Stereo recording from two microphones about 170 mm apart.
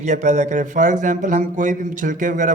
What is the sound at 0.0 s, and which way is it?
Speech, 45° right (ahead or behind).